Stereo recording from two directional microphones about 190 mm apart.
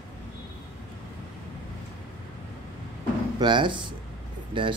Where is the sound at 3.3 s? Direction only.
25° right (ahead or behind).